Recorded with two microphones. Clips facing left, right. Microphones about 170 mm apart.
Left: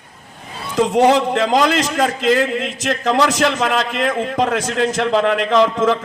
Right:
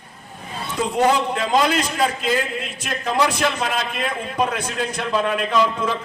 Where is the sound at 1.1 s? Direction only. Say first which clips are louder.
Left 5 dB; 90° left.